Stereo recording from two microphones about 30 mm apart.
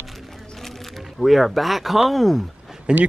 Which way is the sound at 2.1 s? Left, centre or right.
Centre.